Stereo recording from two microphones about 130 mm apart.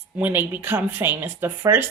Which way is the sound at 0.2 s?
15° right (ahead or behind).